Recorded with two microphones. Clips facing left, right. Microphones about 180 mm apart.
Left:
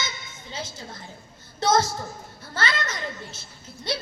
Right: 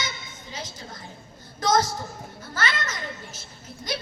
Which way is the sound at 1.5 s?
25° left (ahead or behind).